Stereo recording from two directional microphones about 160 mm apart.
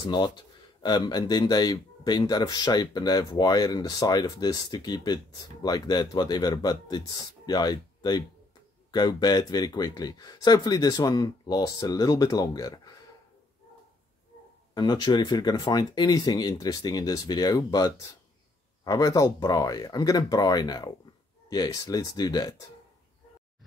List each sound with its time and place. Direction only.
0.0 s speech: 25° left (ahead or behind)
14.7 s speech: 30° left (ahead or behind)